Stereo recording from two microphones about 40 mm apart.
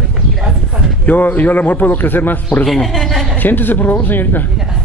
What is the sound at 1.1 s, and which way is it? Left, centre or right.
A man's voice, left.